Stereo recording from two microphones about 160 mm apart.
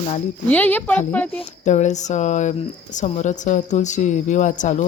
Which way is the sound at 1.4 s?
45° left (ahead or behind).